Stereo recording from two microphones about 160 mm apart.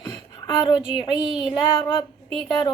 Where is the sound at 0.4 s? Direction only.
30° left (ahead or behind).